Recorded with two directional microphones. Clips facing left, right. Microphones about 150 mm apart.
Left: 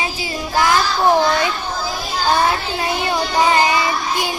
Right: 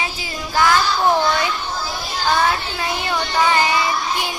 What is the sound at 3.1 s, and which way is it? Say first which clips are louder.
Child singing: left 2 dB; 25° left (ahead or behind).